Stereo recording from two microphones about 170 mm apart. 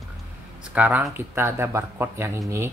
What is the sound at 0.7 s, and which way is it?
Speech, 10° right (ahead or behind).